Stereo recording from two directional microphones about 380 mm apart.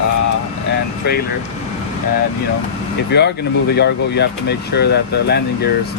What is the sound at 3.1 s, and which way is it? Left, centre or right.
Speech, left.